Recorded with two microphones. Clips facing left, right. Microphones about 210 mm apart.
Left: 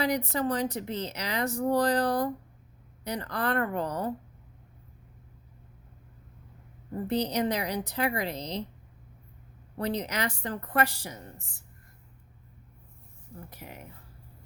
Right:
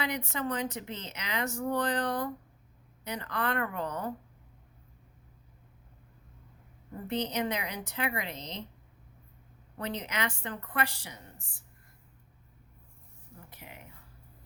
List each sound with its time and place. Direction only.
0.0 s speech: 35° left (ahead or behind)
7.1 s speech: 35° left (ahead or behind)
9.7 s speech: 35° left (ahead or behind)
13.5 s speech: 40° left (ahead or behind)